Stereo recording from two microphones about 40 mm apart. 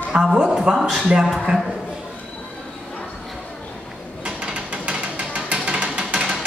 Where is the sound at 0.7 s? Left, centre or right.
Centre.